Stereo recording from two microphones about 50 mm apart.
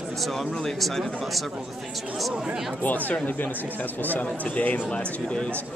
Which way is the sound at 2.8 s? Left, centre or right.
Left.